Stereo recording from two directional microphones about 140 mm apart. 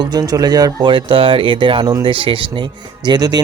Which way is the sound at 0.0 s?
30° right (ahead or behind).